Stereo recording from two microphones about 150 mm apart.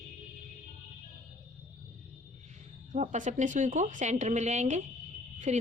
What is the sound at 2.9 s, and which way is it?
Speech, 55° right (ahead or behind).